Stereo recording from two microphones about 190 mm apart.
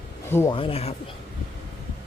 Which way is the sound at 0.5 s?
30° left (ahead or behind).